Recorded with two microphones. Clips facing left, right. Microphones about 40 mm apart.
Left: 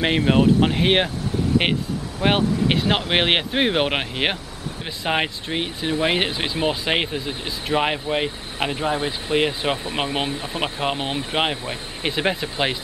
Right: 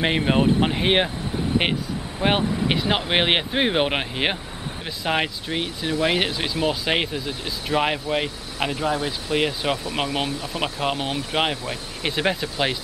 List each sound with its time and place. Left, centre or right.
0.2 s speech: centre; by 10.6 s left
10.6 s speech: centre